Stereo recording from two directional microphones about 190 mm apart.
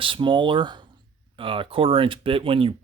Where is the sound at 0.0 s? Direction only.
25° right (ahead or behind).